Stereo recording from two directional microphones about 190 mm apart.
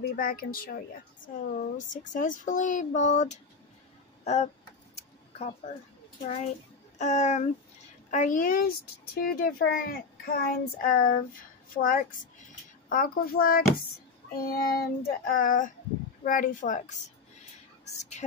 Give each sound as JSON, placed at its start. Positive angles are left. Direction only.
{"t": 0.0, "sound": "a child's voice", "side_deg": 50}
{"t": 6.2, "sound": "a child's voice", "side_deg": 35}
{"t": 17.8, "sound": "a woman's voice", "side_deg": 35}